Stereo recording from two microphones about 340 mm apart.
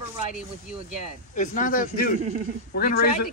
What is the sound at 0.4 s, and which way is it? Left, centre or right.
Speech, centre.